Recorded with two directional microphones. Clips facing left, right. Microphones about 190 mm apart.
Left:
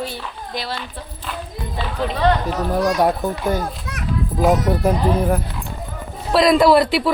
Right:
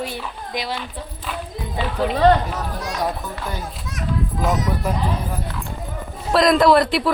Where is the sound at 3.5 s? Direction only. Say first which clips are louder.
Left 7 dB; 60° left (ahead or behind).